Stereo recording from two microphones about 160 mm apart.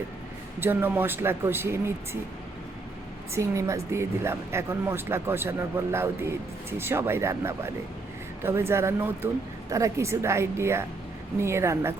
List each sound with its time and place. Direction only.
0.6 s speech: 15° right (ahead or behind)
3.3 s speech: 20° right (ahead or behind)